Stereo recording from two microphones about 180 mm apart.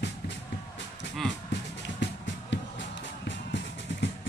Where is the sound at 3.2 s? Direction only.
80° left.